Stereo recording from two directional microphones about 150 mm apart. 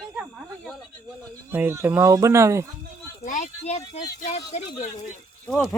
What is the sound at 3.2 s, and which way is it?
Speech, 55° left (ahead or behind).